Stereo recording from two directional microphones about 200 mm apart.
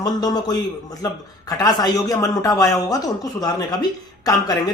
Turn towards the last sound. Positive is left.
turn(degrees=20)  # may be behind; listen again after turning